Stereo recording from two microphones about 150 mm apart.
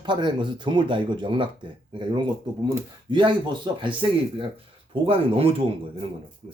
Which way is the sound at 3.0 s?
30° right (ahead or behind).